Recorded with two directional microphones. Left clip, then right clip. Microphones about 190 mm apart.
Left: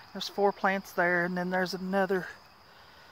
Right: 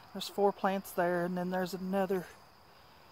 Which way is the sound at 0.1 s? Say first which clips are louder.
Left 3 dB; 10° left (ahead or behind).